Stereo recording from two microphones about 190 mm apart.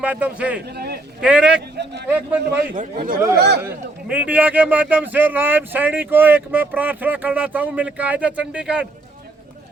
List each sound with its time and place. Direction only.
0.0 s a man's voice: 5° right (ahead or behind)
2.7 s speech: 45° right (ahead or behind)
3.3 s speech: 60° right (ahead or behind)
3.6 s a man's voice: 10° right (ahead or behind)